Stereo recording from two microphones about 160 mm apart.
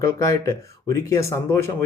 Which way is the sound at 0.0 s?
20° left (ahead or behind).